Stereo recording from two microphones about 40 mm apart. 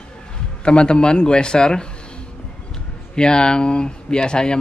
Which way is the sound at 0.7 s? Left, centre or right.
Left.